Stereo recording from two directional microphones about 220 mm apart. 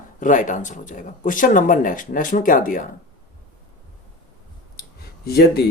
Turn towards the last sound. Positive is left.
turn(degrees=45)  # may be behind; listen again after turning